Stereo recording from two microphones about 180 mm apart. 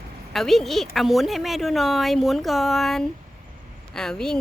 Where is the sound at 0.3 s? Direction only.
Centre (ahead or behind).